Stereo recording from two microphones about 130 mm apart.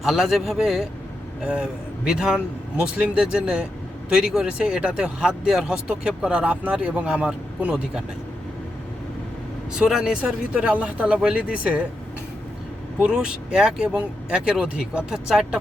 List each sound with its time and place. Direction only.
0.0 s a man's voice: 5° right (ahead or behind)
9.7 s speech: 5° right (ahead or behind)
13.0 s speech: 5° right (ahead or behind)